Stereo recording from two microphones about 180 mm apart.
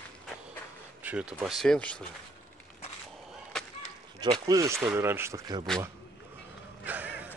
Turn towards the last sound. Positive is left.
turn(degrees=-10)  # may be behind; listen again after turning